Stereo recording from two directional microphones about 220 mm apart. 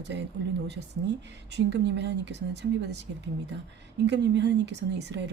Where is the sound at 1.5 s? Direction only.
50° right (ahead or behind).